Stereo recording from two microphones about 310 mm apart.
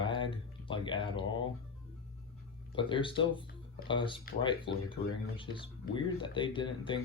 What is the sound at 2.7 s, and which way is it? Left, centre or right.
Speech, centre.